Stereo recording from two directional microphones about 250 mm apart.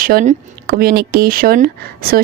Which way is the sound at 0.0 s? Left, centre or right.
Right.